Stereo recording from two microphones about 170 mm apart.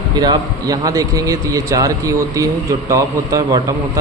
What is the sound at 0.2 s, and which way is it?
A man's voice, 20° right (ahead or behind).